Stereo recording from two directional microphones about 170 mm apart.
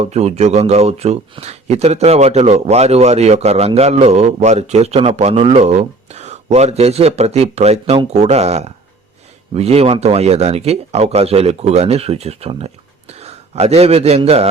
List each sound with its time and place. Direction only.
0.0 s a man's voice: 40° right (ahead or behind)